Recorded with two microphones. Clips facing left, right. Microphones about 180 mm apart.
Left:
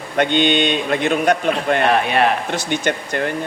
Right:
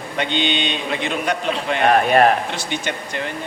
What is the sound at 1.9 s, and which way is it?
Speech, 45° right (ahead or behind).